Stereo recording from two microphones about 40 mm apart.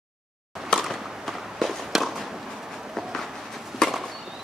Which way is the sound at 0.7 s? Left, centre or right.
Centre.